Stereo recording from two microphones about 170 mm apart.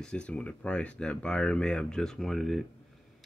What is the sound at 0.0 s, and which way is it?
Speech, 5° left (ahead or behind).